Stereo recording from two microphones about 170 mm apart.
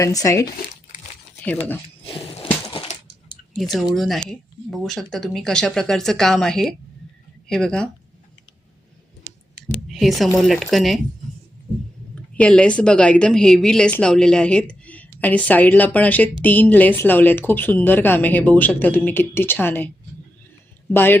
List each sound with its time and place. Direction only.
0.0 s speech: 20° left (ahead or behind)
2.7 s a sound: 40° left (ahead or behind)
3.5 s speech: centre (ahead or behind)
9.9 s speech: centre (ahead or behind)
12.4 s a woman's voice: 5° left (ahead or behind)
20.9 s a woman's voice: 10° left (ahead or behind)